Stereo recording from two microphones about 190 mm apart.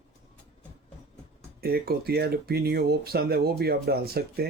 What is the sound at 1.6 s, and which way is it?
Speech, 55° right (ahead or behind).